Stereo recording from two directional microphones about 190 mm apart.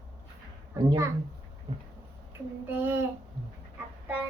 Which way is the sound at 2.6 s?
10° right (ahead or behind).